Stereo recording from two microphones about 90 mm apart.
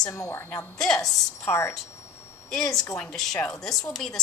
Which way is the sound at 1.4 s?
30° left (ahead or behind).